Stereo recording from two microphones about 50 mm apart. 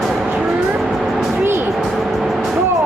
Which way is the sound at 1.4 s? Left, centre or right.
Right.